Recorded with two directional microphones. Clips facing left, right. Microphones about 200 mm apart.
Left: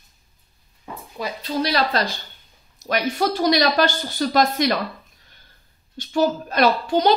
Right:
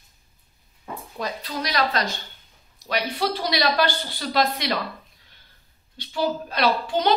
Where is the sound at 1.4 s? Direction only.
30° left (ahead or behind).